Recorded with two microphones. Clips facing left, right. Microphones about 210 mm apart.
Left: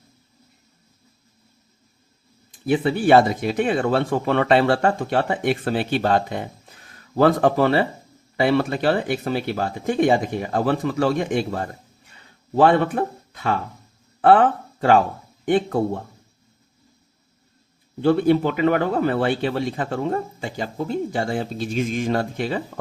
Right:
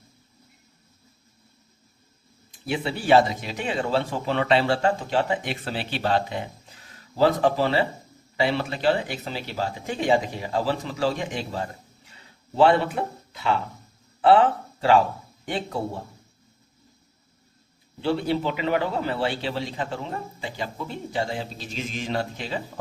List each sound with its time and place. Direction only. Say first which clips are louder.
2.6 s a man's voice: left 5 dB; 55° left (ahead or behind)
18.0 s a man's voice: left 7 dB; 50° left (ahead or behind)